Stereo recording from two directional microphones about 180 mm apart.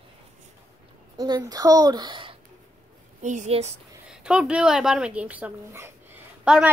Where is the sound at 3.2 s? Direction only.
40° right (ahead or behind).